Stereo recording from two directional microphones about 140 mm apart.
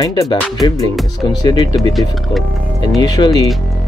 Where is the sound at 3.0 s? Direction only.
30° left (ahead or behind).